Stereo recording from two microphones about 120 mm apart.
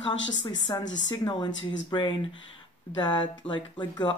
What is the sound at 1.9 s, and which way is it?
Speech, 35° left (ahead or behind).